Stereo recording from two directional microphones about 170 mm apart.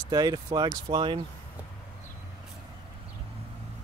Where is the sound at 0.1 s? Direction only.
20° right (ahead or behind).